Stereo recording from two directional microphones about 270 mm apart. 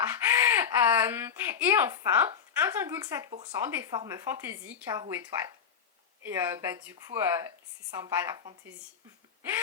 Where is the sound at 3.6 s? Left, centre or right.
Centre.